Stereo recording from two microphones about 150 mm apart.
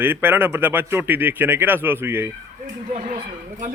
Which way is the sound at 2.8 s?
60° right (ahead or behind).